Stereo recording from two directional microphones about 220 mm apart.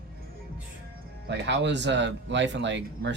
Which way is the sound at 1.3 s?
50° right (ahead or behind).